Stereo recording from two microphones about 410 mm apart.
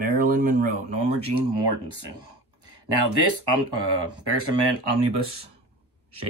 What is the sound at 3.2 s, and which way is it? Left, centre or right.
Speech, right.